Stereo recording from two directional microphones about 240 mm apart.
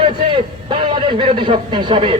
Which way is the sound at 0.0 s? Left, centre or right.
Right.